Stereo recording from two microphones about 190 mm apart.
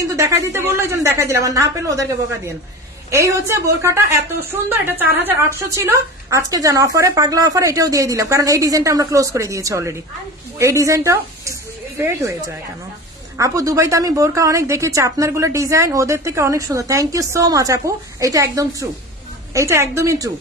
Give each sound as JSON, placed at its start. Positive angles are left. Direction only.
{"t": 0.1, "sound": "a woman's voice", "side_deg": -15}
{"t": 13.4, "sound": "a woman's voice", "side_deg": -15}